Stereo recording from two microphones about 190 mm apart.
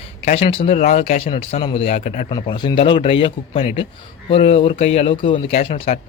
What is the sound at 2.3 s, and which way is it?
A man's voice, 25° left (ahead or behind).